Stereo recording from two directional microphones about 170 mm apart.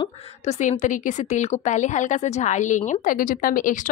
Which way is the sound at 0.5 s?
45° left (ahead or behind).